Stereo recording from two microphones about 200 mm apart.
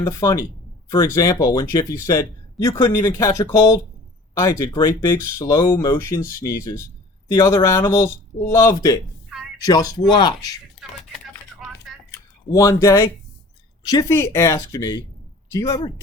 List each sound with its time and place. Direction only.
0.0 s speech: 15° left (ahead or behind)
11.6 s a sound: centre (ahead or behind)
12.5 s speech: 15° left (ahead or behind)